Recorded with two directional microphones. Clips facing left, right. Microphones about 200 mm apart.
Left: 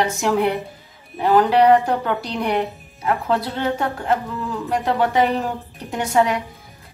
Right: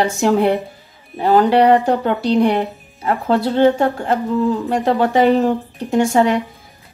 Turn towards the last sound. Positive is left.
turn(degrees=-30)  # may be behind; listen again after turning